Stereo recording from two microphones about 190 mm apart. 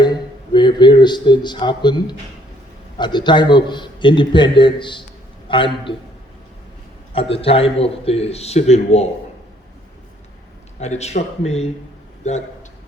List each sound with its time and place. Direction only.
0.0 s a man's voice: 25° left (ahead or behind)
7.1 s a man's voice: 30° left (ahead or behind)
10.8 s a man's voice: 35° left (ahead or behind)